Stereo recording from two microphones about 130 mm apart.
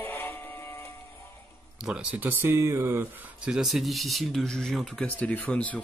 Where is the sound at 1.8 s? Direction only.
10° right (ahead or behind).